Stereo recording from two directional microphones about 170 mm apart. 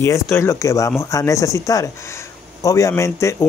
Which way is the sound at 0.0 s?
15° left (ahead or behind).